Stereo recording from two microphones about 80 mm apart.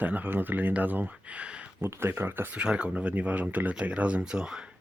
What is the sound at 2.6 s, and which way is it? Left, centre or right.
Speech, centre.